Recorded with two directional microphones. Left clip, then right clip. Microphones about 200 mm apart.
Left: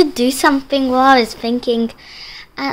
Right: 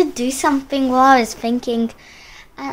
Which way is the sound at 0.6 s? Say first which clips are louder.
Right 2 dB; centre (ahead or behind).